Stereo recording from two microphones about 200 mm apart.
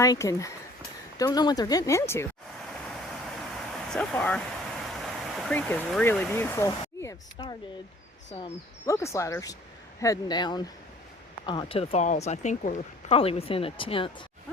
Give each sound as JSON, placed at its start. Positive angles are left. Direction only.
{"t": 0.0, "sound": "speech", "side_deg": 15}
{"t": 3.7, "sound": "speech", "side_deg": 5}
{"t": 8.9, "sound": "speech", "side_deg": 15}